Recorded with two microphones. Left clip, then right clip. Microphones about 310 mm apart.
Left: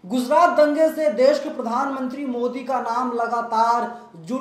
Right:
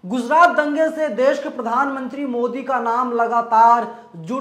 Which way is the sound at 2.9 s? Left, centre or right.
Right.